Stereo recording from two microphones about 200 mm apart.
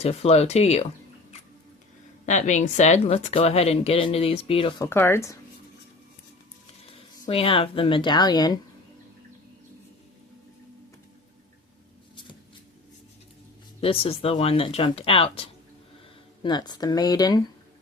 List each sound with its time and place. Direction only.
0.0 s speech: 30° left (ahead or behind)
2.2 s speech: 35° left (ahead or behind)
4.8 s speech: 10° left (ahead or behind)
7.3 s speech: 30° left (ahead or behind)
13.8 s speech: 30° left (ahead or behind)